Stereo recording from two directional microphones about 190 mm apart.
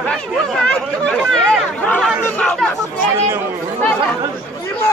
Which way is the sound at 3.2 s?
15° right (ahead or behind).